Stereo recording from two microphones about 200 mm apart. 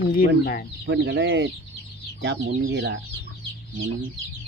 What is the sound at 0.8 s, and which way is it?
Speech, 60° right (ahead or behind).